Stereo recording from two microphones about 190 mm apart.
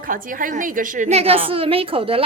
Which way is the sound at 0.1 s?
45° right (ahead or behind).